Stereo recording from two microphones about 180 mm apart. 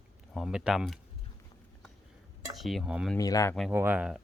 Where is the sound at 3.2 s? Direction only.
20° left (ahead or behind).